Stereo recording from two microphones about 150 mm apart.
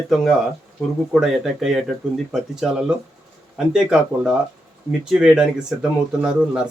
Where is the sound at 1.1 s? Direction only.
5° right (ahead or behind).